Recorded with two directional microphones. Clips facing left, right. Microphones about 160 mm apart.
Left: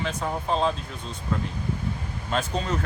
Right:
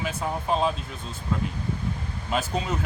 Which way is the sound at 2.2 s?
10° right (ahead or behind).